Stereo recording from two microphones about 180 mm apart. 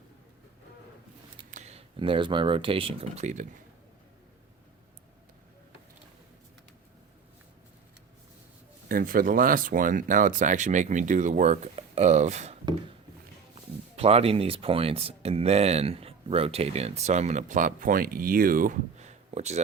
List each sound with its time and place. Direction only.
1.5 s speech: 40° right (ahead or behind)
8.9 s speech: 50° right (ahead or behind)
13.9 s speech: 35° right (ahead or behind)